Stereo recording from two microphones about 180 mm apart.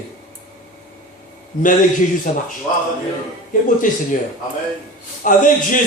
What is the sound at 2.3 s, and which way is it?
Speech, 45° left (ahead or behind).